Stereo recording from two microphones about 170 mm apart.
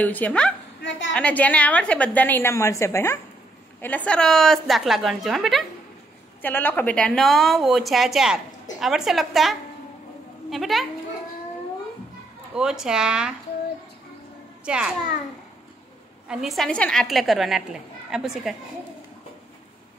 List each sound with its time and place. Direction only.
0.0 s a woman's voice: 10° left (ahead or behind)
6.4 s a woman's voice: 10° left (ahead or behind)
12.5 s a woman's voice: 5° right (ahead or behind)
14.6 s a child's voice: 5° right (ahead or behind)
16.3 s a woman's voice: centre (ahead or behind)